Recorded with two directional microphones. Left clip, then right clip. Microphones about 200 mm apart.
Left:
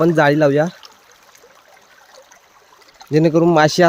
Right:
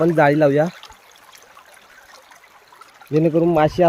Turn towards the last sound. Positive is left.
turn(degrees=20)  # may be behind; listen again after turning